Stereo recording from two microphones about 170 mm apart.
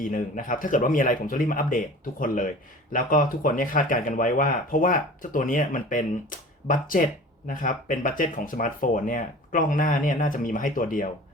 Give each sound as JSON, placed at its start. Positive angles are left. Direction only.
{"t": 0.0, "sound": "speech", "side_deg": 50}